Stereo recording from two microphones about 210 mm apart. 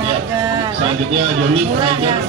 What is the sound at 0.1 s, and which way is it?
A man's voice, 20° right (ahead or behind).